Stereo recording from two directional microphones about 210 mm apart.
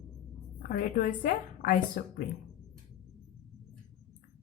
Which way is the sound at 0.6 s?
40° left (ahead or behind).